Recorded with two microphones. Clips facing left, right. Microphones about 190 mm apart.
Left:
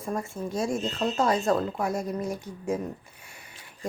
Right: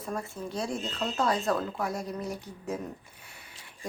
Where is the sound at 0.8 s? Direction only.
20° left (ahead or behind).